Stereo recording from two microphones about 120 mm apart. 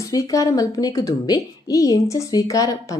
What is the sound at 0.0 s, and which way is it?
A woman's voice, 30° left (ahead or behind).